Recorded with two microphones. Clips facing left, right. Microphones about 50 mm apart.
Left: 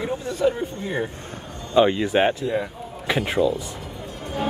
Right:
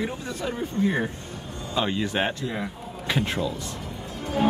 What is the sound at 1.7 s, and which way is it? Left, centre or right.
Speech, centre.